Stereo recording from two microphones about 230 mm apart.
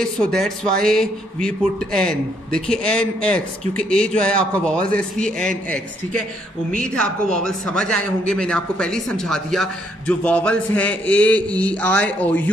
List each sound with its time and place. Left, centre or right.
0.0 s a man's voice: centre
6.7 s a man's voice: centre